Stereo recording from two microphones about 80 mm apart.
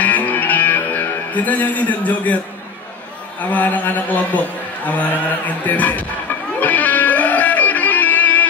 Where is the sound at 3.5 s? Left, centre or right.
Centre.